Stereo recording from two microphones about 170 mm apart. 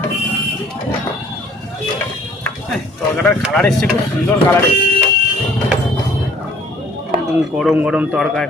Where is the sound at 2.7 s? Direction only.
5° left (ahead or behind).